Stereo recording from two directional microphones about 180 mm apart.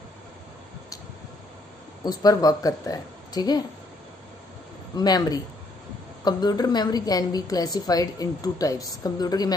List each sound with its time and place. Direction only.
2.0 s a woman's voice: 20° left (ahead or behind)
4.9 s a woman's voice: 20° left (ahead or behind)